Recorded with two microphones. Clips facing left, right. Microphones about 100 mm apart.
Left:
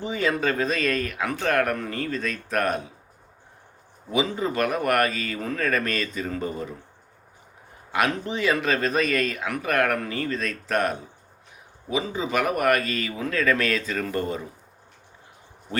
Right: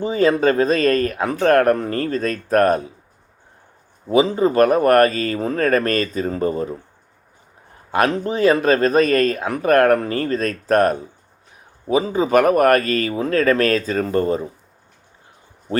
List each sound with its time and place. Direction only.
0.0 s speech: 35° right (ahead or behind)
4.1 s speech: 35° right (ahead or behind)
7.9 s speech: 40° right (ahead or behind)